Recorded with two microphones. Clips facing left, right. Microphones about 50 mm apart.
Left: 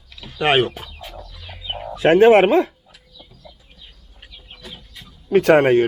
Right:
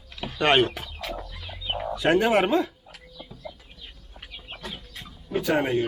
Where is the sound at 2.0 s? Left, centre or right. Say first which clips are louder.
Left 10 dB; left.